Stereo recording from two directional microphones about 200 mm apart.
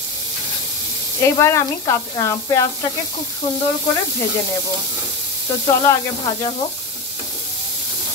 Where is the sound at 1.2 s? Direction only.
15° left (ahead or behind).